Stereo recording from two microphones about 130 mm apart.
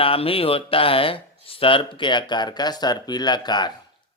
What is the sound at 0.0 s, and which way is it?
Speech, 45° left (ahead or behind).